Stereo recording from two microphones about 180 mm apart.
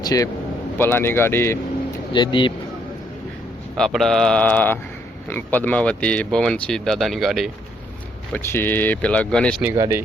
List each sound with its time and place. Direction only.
0.0 s speech: 20° left (ahead or behind)
2.1 s speech: 25° left (ahead or behind)
3.8 s speech: centre (ahead or behind)
8.3 s speech: 10° left (ahead or behind)
9.6 s speech: 15° right (ahead or behind)